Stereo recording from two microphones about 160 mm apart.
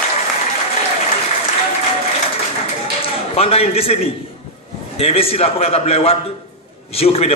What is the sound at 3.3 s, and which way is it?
Speech, 40° left (ahead or behind).